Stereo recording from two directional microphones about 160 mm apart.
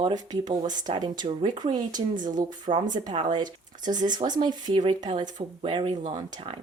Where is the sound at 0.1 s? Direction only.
25° right (ahead or behind).